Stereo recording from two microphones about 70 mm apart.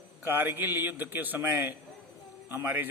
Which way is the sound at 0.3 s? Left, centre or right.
Right.